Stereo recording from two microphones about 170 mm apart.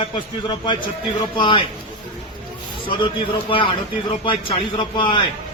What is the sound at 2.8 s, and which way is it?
A man's voice, 30° left (ahead or behind).